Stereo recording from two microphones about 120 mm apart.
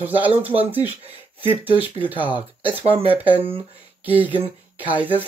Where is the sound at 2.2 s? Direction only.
15° right (ahead or behind).